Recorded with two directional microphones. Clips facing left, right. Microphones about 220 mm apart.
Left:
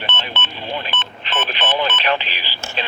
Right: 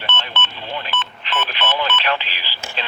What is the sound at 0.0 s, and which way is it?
Telephone dialing, 15° left (ahead or behind).